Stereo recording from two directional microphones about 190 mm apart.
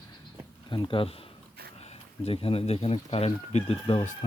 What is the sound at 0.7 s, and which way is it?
Speech, 25° left (ahead or behind).